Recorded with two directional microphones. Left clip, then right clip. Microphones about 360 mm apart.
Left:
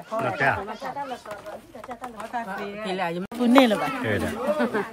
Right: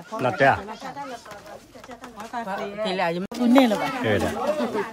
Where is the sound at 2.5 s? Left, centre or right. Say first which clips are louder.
Right 3 dB; right.